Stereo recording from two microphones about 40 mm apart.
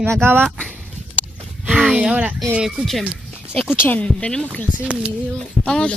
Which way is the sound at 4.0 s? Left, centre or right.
Left.